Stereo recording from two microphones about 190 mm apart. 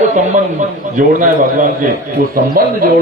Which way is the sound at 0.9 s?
45° right (ahead or behind).